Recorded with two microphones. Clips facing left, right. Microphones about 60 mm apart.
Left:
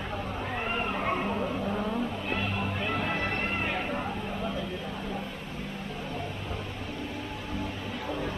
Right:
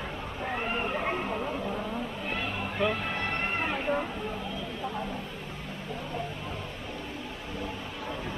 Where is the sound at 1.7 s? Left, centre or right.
Centre.